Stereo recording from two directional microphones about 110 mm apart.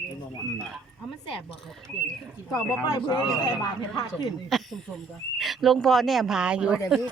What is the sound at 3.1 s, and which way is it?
Speech, 45° left (ahead or behind).